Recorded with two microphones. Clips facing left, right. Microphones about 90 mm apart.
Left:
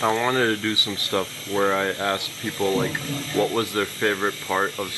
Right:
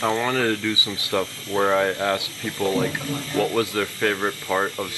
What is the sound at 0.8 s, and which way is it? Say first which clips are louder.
Speech: right 1 dB; 15° right (ahead or behind).